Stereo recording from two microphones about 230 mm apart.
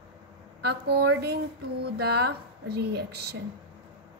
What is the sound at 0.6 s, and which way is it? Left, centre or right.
A woman's voice, right.